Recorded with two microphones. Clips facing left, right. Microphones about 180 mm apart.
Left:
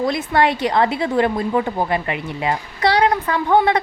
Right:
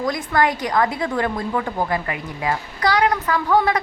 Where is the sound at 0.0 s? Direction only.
25° left (ahead or behind).